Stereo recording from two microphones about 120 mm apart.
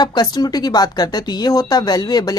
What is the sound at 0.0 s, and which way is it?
Speech, 35° left (ahead or behind).